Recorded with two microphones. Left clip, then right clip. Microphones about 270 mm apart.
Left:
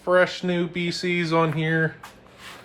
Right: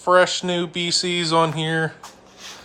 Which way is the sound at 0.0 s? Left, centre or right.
Centre.